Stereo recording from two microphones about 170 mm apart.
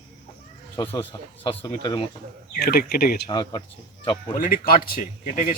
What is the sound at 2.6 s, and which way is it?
Speech, 65° left (ahead or behind).